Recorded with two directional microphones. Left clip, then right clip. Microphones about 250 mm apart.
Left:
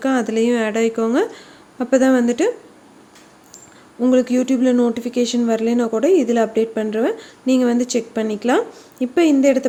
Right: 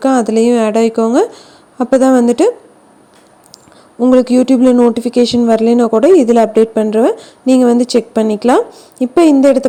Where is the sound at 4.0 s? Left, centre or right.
Right.